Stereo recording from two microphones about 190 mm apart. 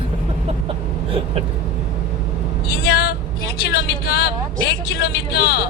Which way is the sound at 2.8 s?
55° left (ahead or behind).